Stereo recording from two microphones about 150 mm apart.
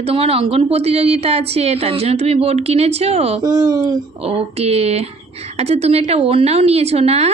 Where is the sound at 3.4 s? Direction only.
30° right (ahead or behind).